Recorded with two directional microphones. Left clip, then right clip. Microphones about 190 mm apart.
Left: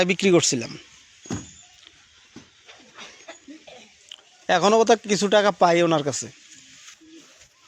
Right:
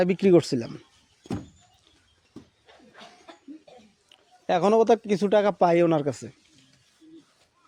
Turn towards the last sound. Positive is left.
turn(degrees=-20)  # may be behind; listen again after turning